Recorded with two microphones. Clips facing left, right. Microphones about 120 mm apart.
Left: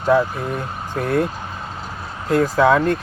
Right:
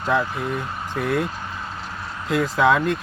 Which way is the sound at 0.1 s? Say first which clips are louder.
Left 5 dB; 40° left (ahead or behind).